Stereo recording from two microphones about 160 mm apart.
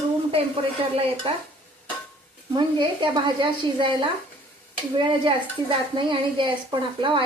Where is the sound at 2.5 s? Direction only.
30° right (ahead or behind).